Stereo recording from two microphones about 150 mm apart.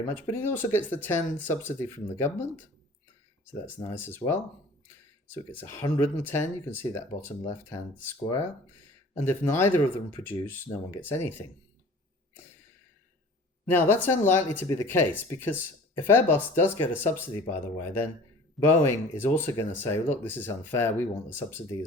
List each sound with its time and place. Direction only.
0.0 s speech: 15° left (ahead or behind)
3.7 s speech: 15° left (ahead or behind)
5.5 s speech: 15° left (ahead or behind)
13.7 s speech: 15° left (ahead or behind)